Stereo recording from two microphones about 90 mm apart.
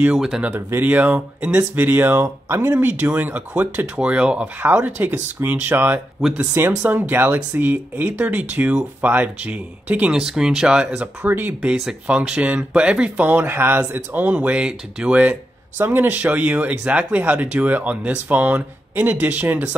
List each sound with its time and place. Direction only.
0.1 s speech: 5° right (ahead or behind)
0.6 s speech: 25° right (ahead or behind)
2.8 s speech: 15° right (ahead or behind)
11.2 s speech: 20° right (ahead or behind)